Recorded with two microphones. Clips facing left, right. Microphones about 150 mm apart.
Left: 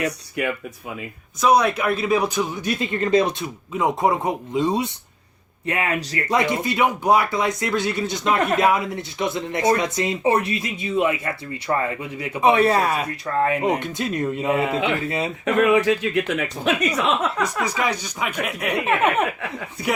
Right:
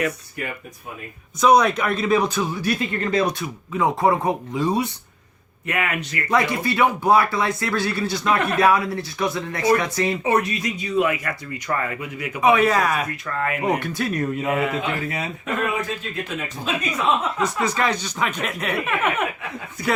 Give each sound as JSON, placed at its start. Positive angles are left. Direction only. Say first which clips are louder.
{"t": 0.4, "sound": "speech", "louder": "left 8 dB", "side_deg": 75}
{"t": 1.4, "sound": "speech", "louder": "right 1 dB", "side_deg": 5}
{"t": 5.6, "sound": "speech", "louder": "left 1 dB", "side_deg": 30}
{"t": 6.2, "sound": "speech", "louder": "right 1 dB", "side_deg": 20}
{"t": 15.4, "sound": "speech", "louder": "left 9 dB", "side_deg": 90}
{"t": 17.4, "sound": "speech", "louder": "right 1 dB", "side_deg": 10}
{"t": 18.9, "sound": "speech", "louder": "left 6 dB", "side_deg": 30}